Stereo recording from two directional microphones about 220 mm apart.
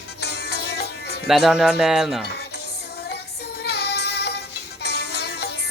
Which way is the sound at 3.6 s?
50° left (ahead or behind).